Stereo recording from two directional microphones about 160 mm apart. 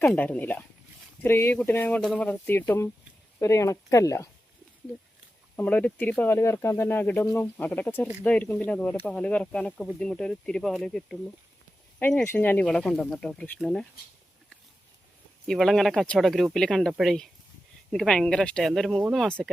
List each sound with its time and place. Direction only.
0.0 s speech: 5° left (ahead or behind)
5.5 s speech: 10° left (ahead or behind)
15.4 s speech: centre (ahead or behind)